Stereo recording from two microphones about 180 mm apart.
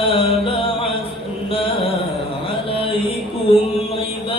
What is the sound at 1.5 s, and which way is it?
Music, 30° left (ahead or behind).